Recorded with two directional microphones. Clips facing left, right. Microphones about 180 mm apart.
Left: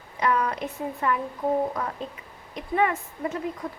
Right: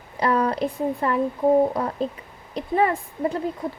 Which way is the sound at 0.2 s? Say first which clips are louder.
Right 4 dB; 30° right (ahead or behind).